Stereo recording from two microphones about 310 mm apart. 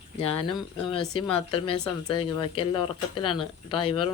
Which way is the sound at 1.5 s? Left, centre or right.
Centre.